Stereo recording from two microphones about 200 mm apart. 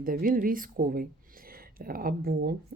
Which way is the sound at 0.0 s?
45° right (ahead or behind).